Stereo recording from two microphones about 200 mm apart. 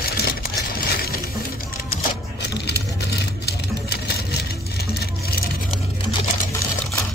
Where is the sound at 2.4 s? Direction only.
55° left (ahead or behind).